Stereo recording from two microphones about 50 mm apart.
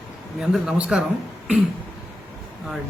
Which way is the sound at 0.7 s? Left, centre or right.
Right.